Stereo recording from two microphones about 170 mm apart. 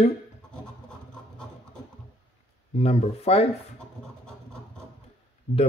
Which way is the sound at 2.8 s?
35° left (ahead or behind).